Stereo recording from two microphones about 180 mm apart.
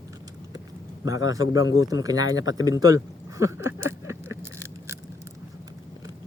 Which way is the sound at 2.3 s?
90° left.